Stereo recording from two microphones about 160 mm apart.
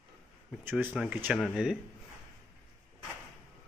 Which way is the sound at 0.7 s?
10° right (ahead or behind).